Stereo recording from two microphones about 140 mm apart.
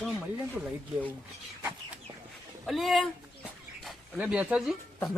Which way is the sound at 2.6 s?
Centre (ahead or behind).